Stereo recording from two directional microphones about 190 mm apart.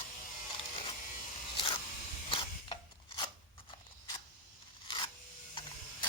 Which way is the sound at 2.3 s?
25° left (ahead or behind).